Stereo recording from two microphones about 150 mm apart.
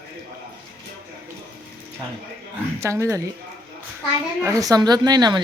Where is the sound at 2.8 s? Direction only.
20° right (ahead or behind).